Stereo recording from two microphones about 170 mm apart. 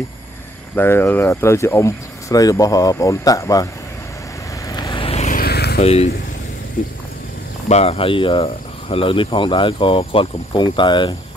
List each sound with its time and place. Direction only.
0.7 s speech: 10° left (ahead or behind)
4.6 s vehicle: 25° left (ahead or behind)
5.3 s vehicle: 65° left (ahead or behind)
5.8 s speech: 40° left (ahead or behind)
7.6 s speech: 40° left (ahead or behind)